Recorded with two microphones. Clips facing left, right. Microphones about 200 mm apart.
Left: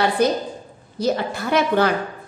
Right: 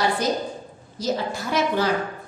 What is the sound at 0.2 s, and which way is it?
A woman's voice, 60° left (ahead or behind).